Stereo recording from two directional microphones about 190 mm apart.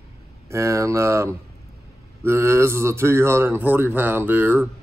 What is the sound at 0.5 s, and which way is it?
Speech, 15° right (ahead or behind).